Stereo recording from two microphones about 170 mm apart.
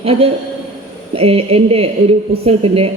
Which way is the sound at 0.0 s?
35° right (ahead or behind).